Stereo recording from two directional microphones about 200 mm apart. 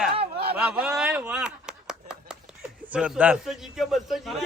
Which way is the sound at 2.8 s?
5° right (ahead or behind).